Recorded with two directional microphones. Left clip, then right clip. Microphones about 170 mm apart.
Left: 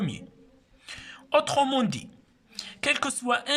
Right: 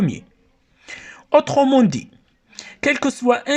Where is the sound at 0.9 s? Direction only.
45° right (ahead or behind).